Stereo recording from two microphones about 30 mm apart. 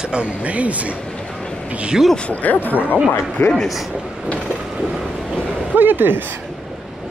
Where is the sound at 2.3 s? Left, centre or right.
Left.